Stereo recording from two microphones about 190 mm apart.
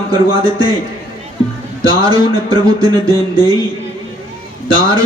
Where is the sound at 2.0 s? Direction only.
20° right (ahead or behind).